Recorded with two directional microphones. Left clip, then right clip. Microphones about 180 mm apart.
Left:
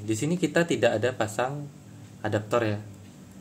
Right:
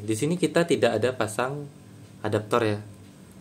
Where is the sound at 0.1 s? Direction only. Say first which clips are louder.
Right 2 dB; 20° right (ahead or behind).